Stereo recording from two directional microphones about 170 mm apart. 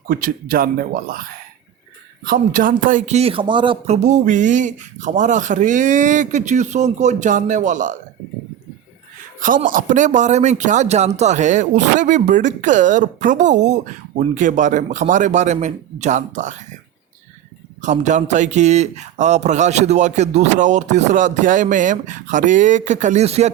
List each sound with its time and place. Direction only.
0.1 s speech: 55° right (ahead or behind)
2.2 s a man's voice: 55° right (ahead or behind)
9.6 s a man's voice: 50° right (ahead or behind)
17.7 s a man's voice: 45° right (ahead or behind)